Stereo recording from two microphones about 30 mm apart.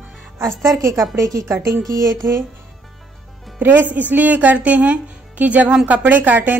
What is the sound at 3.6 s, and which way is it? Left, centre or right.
Speech, right.